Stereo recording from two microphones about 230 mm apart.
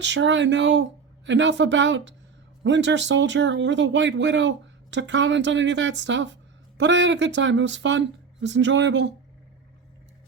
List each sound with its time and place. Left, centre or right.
0.0 s speech: right